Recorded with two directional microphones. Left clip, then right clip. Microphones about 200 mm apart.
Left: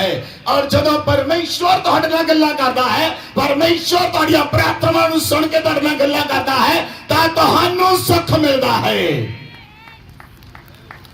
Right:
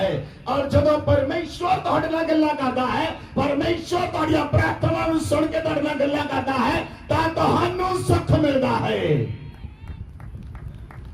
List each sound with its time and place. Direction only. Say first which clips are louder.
0.4 s music: left 5 dB; 40° left (ahead or behind)